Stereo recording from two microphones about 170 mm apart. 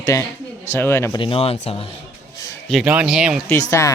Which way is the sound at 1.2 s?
35° left (ahead or behind).